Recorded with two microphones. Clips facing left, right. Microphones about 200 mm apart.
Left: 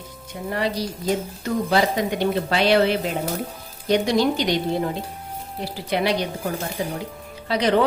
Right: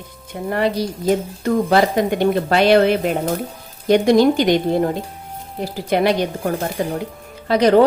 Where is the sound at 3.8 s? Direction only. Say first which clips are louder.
Right 7 dB; 50° right (ahead or behind).